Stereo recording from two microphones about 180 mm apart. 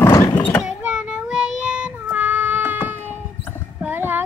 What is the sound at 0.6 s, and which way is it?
Child singing, 5° right (ahead or behind).